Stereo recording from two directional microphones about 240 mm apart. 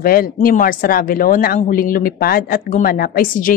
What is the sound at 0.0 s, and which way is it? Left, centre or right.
A woman's voice, left.